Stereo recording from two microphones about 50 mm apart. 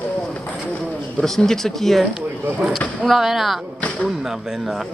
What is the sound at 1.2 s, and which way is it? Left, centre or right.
A man's voice, centre.